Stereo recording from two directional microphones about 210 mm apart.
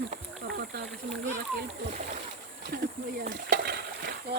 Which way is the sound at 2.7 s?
50° right (ahead or behind).